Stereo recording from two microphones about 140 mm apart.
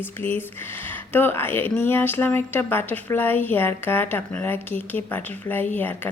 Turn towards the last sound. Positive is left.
turn(degrees=15)  # may be behind; listen again after turning